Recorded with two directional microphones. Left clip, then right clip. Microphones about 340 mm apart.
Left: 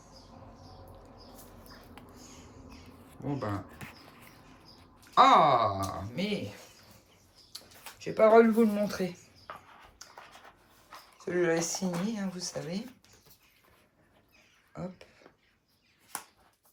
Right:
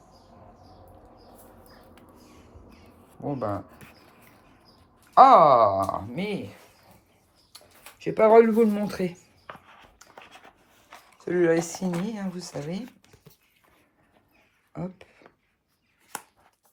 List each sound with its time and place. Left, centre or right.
3.2 s speech: centre
5.1 s speech: centre
7.5 s speech: right
10.0 s writing: right
14.7 s a sound: right